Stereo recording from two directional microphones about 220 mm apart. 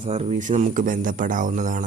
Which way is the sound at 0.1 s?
30° right (ahead or behind).